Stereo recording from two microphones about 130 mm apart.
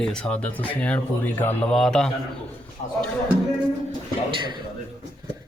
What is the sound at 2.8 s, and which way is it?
Speech, 65° left (ahead or behind).